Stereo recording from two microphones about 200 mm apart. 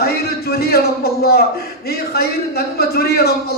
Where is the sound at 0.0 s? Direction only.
50° left (ahead or behind).